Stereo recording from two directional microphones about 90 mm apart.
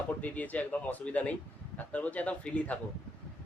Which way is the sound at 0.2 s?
15° left (ahead or behind).